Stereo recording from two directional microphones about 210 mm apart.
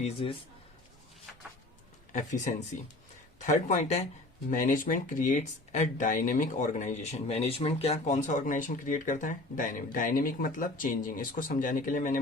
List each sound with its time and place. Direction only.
0.0 s a man's voice: 25° left (ahead or behind)
2.1 s speech: 35° left (ahead or behind)